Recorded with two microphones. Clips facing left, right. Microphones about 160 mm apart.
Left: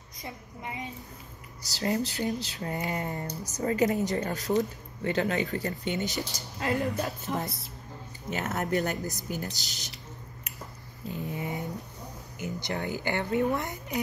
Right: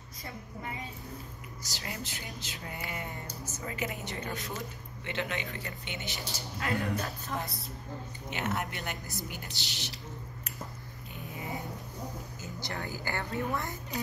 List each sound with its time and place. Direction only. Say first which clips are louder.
0.2 s a woman's voice: left 1 dB; 20° left (ahead or behind)
1.7 s a woman's voice: left 12 dB; 35° left (ahead or behind)
6.6 s a woman's voice: left 4 dB; 20° left (ahead or behind)
7.4 s a woman's voice: left 3 dB; centre (ahead or behind)
8.3 s a woman's voice: left 5 dB; 40° left (ahead or behind)
11.1 s a sound: left 7 dB; 25° left (ahead or behind)
12.4 s a woman's voice: left 9 dB; 20° left (ahead or behind)